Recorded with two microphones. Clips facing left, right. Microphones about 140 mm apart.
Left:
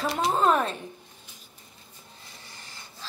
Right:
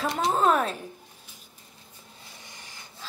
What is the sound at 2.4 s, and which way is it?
Wood, 15° right (ahead or behind).